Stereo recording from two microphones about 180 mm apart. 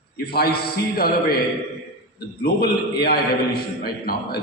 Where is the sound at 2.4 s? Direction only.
60° left (ahead or behind).